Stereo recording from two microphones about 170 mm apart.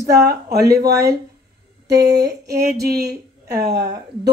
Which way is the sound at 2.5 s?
70° right (ahead or behind).